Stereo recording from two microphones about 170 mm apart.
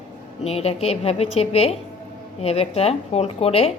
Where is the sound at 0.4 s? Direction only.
35° left (ahead or behind).